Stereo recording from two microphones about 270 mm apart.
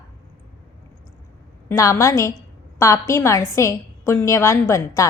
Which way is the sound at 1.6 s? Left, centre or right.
Centre.